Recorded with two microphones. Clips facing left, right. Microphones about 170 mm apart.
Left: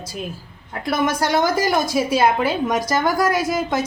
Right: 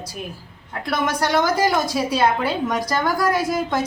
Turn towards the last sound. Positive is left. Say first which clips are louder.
# even
turn(degrees=20)  # may be behind; listen again after turning